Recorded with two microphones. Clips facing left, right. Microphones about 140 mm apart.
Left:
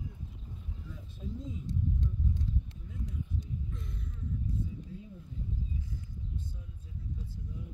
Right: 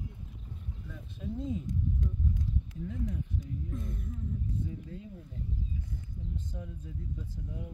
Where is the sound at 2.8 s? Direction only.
75° right (ahead or behind).